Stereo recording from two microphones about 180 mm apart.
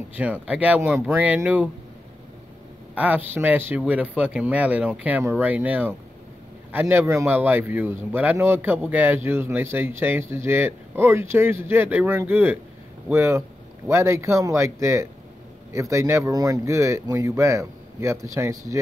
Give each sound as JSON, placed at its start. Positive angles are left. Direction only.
{"t": 0.1, "sound": "a man's voice", "side_deg": -10}
{"t": 2.9, "sound": "a man's voice", "side_deg": -10}